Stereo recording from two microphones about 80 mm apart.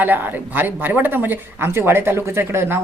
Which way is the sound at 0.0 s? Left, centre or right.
Right.